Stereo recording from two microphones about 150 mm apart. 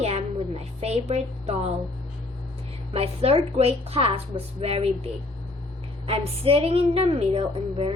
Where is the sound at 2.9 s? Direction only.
40° right (ahead or behind).